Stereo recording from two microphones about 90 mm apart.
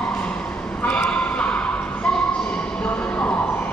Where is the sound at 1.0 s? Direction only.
15° left (ahead or behind).